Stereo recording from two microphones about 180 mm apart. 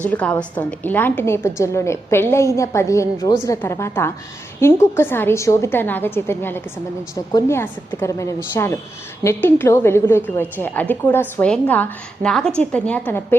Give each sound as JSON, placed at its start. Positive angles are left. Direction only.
{"t": 0.0, "sound": "a woman's voice", "side_deg": 5}